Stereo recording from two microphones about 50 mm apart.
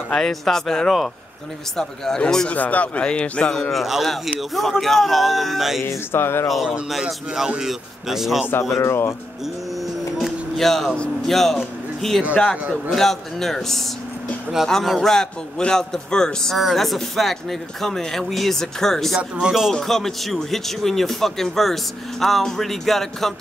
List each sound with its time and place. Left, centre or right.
0.1 s a man's voice: centre
2.5 s a man's voice: left
3.7 s speech: centre
5.8 s music: left
6.9 s a man's voice: centre
8.6 s speech: left
10.1 s music: centre
11.2 s a man's voice: centre
16.5 s speech: centre
19.1 s a man's voice: centre
19.7 s speech: centre